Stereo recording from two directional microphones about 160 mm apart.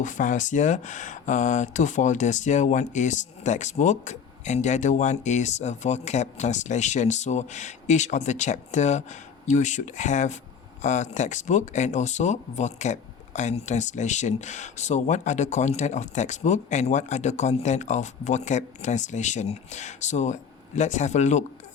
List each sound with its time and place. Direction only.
0.0 s speech: 55° left (ahead or behind)